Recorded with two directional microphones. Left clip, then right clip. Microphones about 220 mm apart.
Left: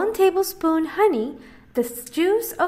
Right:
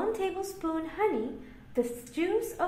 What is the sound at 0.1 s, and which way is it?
A woman's voice, 40° left (ahead or behind).